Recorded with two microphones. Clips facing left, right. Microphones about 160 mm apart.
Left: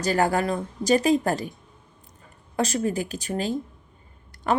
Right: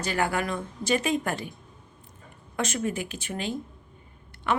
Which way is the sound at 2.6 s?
35° left (ahead or behind).